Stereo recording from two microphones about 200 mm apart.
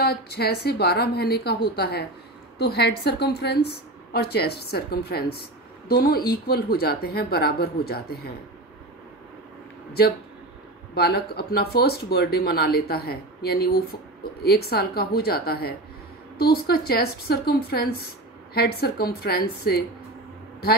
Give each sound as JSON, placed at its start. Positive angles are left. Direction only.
{"t": 0.0, "sound": "speech", "side_deg": 55}
{"t": 11.0, "sound": "speech", "side_deg": 50}